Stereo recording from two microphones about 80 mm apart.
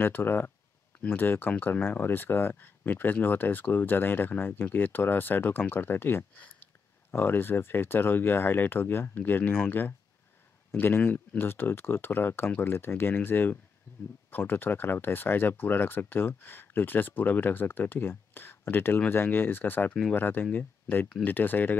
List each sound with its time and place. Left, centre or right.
0.0 s speech: left